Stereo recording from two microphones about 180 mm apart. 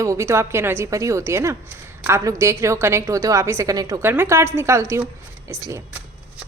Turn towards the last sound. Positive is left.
turn(degrees=-15)  # may be behind; listen again after turning